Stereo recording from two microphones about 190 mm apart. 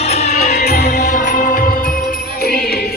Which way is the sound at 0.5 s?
55° left (ahead or behind).